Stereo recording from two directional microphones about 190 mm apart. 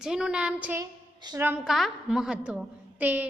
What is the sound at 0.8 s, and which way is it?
Speech, 20° right (ahead or behind).